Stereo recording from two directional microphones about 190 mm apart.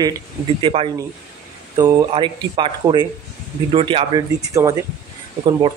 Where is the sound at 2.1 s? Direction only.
25° right (ahead or behind).